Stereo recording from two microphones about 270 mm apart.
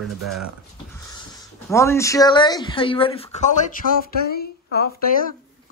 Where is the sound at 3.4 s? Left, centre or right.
Left.